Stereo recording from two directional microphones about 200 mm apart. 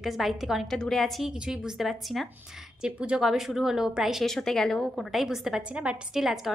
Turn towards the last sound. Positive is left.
turn(degrees=0)  # may be behind; listen again after turning